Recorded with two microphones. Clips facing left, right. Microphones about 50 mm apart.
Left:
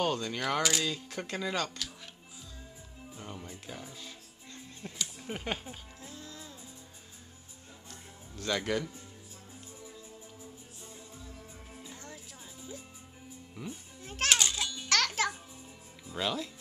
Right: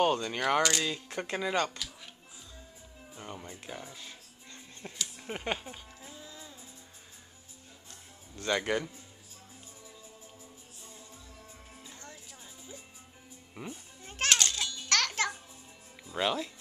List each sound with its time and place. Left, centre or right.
0.0 s speech: centre
0.6 s speech: centre
0.8 s speech: right
3.2 s music: centre
5.2 s a sound: centre
8.4 s speech: centre
11.7 s music: centre
13.6 s speech: right
14.0 s children playing: centre
14.4 s music: centre
16.2 s speech: centre